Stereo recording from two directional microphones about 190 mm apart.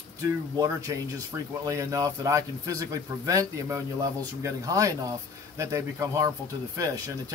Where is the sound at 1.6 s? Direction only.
15° right (ahead or behind).